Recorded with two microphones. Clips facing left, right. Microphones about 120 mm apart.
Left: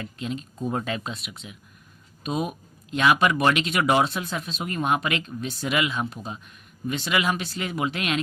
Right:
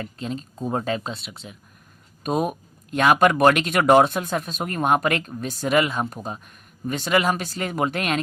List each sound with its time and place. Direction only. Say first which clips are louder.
0.0 s speech: right 1 dB; 35° right (ahead or behind)
2.2 s speech: right 4 dB; 45° right (ahead or behind)